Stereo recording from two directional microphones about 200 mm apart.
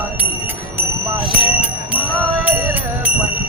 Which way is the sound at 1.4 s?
5° right (ahead or behind).